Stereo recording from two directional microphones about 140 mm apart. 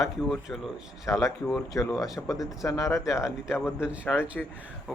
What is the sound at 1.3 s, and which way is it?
Speech, 5° left (ahead or behind).